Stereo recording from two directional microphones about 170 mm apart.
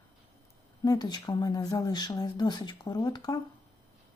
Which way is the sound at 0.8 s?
25° left (ahead or behind).